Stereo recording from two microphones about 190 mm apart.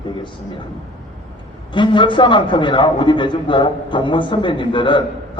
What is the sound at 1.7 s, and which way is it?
A man's voice, 25° left (ahead or behind).